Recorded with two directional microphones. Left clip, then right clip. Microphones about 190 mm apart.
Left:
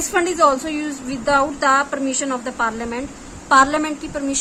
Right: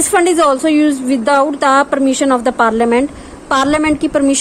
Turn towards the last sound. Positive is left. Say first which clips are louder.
# right 12 dB
turn(degrees=-35)  # may be behind; listen again after turning